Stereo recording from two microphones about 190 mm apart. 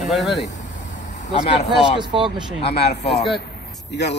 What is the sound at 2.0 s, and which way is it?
Speech, 25° right (ahead or behind).